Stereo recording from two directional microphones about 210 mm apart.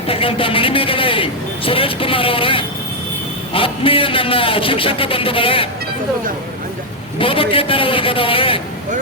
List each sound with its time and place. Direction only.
0.1 s a man's voice: 25° left (ahead or behind)
7.2 s a man's voice: 25° left (ahead or behind)